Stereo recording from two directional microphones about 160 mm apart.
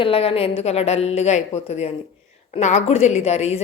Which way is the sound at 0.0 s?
35° left (ahead or behind).